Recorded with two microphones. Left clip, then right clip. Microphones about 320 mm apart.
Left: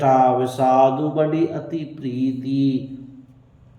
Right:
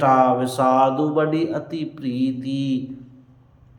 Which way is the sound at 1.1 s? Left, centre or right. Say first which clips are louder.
Even; centre.